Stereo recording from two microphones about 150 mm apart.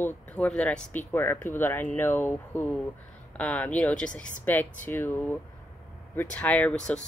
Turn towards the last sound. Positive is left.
turn(degrees=10)  # may be behind; listen again after turning